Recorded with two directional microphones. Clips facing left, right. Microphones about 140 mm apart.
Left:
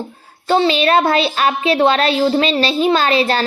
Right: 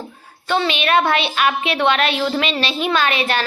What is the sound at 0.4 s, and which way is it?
Speech, 30° left (ahead or behind).